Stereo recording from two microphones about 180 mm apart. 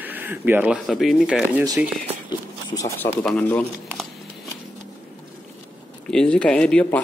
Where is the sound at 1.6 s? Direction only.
15° right (ahead or behind).